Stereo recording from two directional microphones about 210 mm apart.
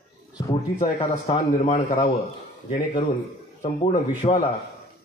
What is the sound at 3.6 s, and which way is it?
Speech, 35° left (ahead or behind).